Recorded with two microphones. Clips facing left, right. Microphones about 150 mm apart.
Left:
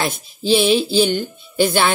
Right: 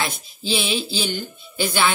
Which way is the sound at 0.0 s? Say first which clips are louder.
Left 5 dB; 50° left (ahead or behind).